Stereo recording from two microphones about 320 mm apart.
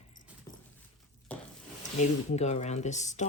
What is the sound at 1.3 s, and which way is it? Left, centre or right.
Wood, centre.